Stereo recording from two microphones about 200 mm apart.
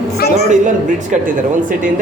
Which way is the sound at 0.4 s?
35° right (ahead or behind).